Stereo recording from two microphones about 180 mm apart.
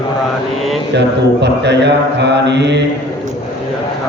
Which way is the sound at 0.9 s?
70° right (ahead or behind).